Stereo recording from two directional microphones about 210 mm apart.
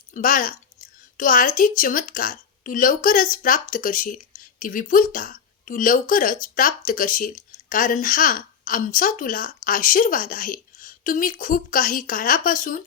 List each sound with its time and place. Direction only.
0.1 s a woman's voice: 40° left (ahead or behind)